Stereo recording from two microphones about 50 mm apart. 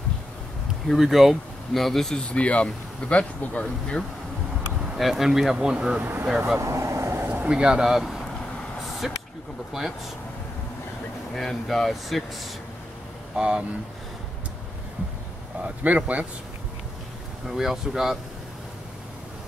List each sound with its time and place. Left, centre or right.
0.8 s speech: centre
2.2 s speech: left
4.9 s speech: centre
5.9 s speech: right
6.2 s speech: centre
6.6 s vehicle: right
7.4 s speech: centre
11.3 s speech: centre
13.4 s speech: centre
15.6 s speech: right
17.5 s speech: centre